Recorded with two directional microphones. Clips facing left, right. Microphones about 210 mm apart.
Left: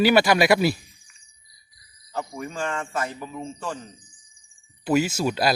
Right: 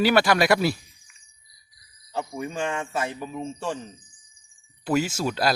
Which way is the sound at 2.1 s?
15° right (ahead or behind).